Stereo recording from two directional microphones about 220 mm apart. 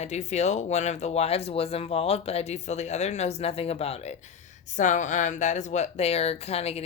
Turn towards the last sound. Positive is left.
turn(degrees=30)  # may be behind; listen again after turning